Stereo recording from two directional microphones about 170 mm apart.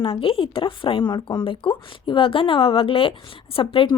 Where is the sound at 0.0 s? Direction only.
30° left (ahead or behind).